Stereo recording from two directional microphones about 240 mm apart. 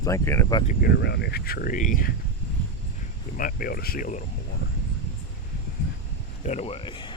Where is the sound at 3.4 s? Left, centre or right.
Left.